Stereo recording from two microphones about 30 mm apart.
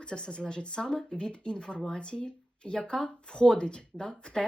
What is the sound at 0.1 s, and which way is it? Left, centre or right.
Speech, left.